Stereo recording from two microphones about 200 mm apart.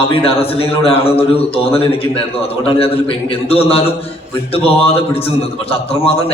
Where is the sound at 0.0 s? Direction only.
30° left (ahead or behind).